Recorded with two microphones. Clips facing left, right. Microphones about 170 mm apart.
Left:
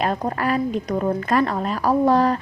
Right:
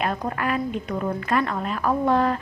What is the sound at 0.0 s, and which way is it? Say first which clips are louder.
A woman's voice: left 3 dB; 35° left (ahead or behind).